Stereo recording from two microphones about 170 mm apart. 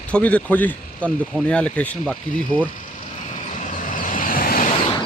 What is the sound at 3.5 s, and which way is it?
Vehicle, 50° left (ahead or behind).